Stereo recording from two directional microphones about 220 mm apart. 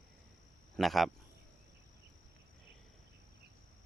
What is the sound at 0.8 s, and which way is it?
Speech, centre (ahead or behind).